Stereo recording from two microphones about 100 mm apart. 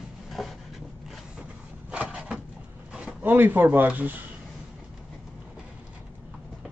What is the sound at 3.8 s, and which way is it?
Speech, 15° right (ahead or behind).